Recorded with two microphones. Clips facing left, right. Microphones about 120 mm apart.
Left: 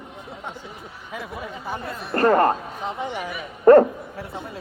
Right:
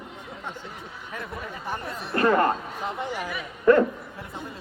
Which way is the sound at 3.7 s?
45° left (ahead or behind).